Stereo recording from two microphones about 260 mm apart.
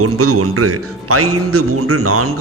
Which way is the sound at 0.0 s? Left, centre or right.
Right.